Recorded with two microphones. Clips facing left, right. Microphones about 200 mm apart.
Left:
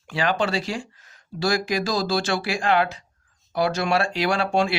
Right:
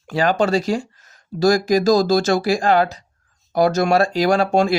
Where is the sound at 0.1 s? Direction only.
40° right (ahead or behind).